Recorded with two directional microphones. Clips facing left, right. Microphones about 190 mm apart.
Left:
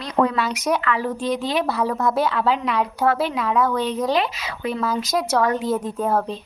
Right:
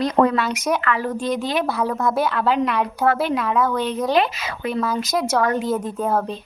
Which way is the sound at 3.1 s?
50° right (ahead or behind).